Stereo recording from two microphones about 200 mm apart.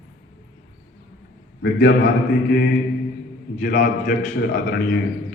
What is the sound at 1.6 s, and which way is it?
Speech, 50° left (ahead or behind).